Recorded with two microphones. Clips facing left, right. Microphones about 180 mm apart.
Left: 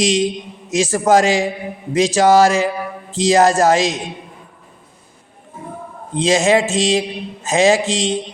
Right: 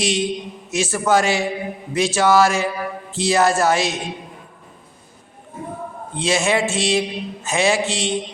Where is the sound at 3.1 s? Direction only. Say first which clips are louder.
Left 5 dB; 90° left.